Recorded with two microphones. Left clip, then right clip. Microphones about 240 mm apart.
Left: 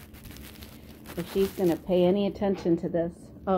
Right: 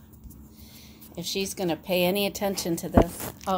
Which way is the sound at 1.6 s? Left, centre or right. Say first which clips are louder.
Even; right.